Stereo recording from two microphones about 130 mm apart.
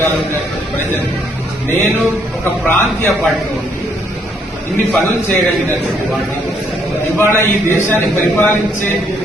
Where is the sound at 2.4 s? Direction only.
15° left (ahead or behind).